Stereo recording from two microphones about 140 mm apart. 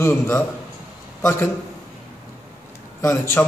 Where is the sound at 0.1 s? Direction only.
15° left (ahead or behind).